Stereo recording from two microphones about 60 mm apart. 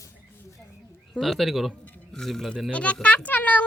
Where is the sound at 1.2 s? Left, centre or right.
Centre.